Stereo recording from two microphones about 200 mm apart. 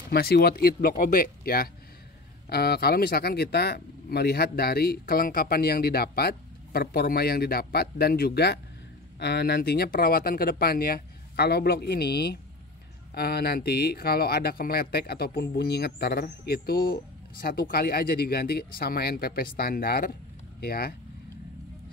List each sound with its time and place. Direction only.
0.1 s speech: 55° left (ahead or behind)